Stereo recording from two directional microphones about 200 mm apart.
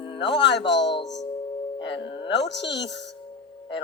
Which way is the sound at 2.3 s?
60° left (ahead or behind).